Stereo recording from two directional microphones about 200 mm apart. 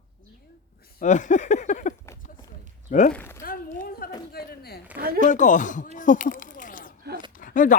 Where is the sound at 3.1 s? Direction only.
10° left (ahead or behind).